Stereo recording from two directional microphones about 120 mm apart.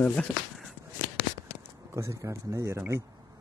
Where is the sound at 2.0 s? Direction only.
25° right (ahead or behind).